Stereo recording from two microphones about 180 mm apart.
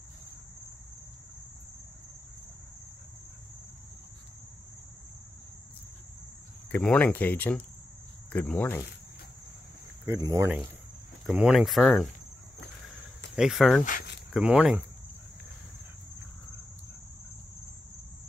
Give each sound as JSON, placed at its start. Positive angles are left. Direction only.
{"t": 6.7, "sound": "speech", "side_deg": 10}
{"t": 10.0, "sound": "speech", "side_deg": -15}
{"t": 11.2, "sound": "speech", "side_deg": -5}
{"t": 13.4, "sound": "speech", "side_deg": 0}